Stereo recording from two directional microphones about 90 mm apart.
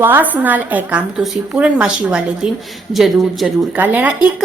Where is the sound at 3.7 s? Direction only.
20° right (ahead or behind).